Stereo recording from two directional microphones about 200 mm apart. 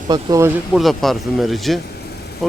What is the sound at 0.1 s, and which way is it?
Speech, 15° right (ahead or behind).